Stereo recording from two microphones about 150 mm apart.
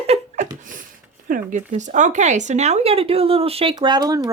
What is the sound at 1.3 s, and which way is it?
Speech, 55° right (ahead or behind).